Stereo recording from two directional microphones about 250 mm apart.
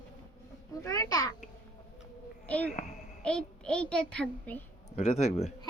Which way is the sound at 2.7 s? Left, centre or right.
Left.